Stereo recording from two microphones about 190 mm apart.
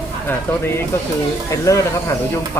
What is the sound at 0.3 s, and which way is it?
Speech, 15° left (ahead or behind).